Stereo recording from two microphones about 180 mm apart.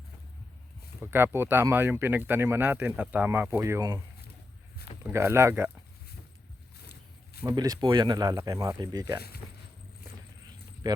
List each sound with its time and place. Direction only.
1.0 s speech: 10° right (ahead or behind)
5.0 s speech: 15° right (ahead or behind)
7.4 s speech: 20° right (ahead or behind)
10.8 s speech: 20° right (ahead or behind)